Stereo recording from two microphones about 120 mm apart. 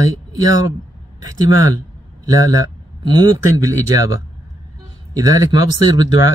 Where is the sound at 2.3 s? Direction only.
30° right (ahead or behind).